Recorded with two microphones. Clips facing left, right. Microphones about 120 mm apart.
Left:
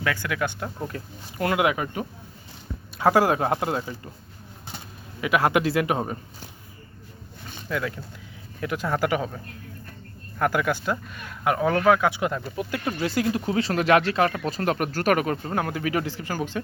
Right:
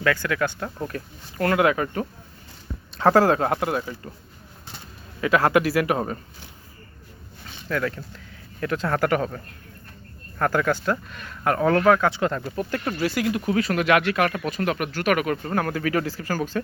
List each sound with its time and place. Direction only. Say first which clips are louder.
0.0 s speech: right 4 dB; 15° left (ahead or behind)
5.2 s speech: right 2 dB; 15° left (ahead or behind)
7.7 s speech: right 3 dB; 10° left (ahead or behind)
13.0 s speech: even; 30° left (ahead or behind)
15.4 s speech: right 2 dB; 20° left (ahead or behind)